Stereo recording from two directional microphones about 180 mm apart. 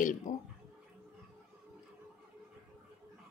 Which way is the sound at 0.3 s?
45° left (ahead or behind).